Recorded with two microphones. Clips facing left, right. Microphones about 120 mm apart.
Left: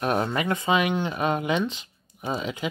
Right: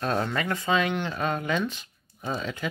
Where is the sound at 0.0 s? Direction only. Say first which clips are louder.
Left 2 dB; 20° left (ahead or behind).